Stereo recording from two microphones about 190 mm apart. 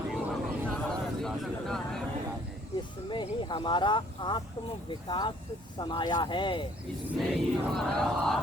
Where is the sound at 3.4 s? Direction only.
25° left (ahead or behind).